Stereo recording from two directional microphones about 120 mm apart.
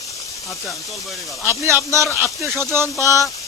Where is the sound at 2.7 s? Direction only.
20° right (ahead or behind).